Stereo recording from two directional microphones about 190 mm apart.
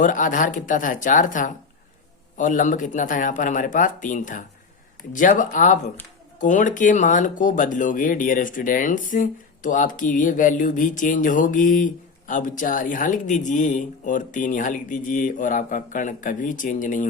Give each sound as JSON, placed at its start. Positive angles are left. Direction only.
{"t": 0.0, "sound": "speech", "side_deg": 45}